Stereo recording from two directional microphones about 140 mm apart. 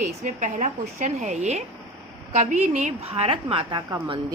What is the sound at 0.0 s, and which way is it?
A woman's voice, 60° right (ahead or behind).